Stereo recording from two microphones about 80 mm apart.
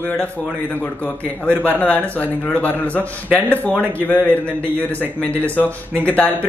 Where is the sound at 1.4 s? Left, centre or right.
Left.